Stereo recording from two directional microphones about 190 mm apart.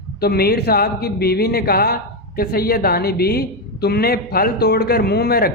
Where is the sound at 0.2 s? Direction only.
55° left (ahead or behind).